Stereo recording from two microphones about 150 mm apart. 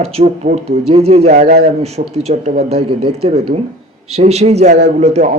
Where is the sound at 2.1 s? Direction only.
45° right (ahead or behind).